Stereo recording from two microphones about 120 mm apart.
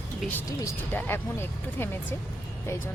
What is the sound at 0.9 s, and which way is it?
Speech, 20° left (ahead or behind).